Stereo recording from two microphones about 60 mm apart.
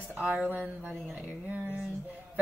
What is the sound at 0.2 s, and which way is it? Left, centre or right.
Speech, centre.